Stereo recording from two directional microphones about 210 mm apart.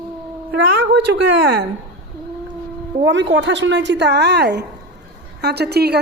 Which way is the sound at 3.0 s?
60° right (ahead or behind).